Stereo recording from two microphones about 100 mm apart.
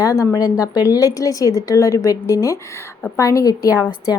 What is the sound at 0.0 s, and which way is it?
A woman's voice, 35° left (ahead or behind).